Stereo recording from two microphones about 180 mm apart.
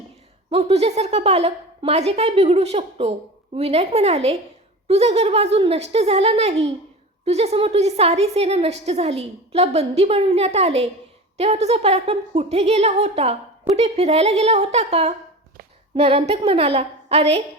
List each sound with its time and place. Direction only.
0.5 s a woman's voice: 35° right (ahead or behind)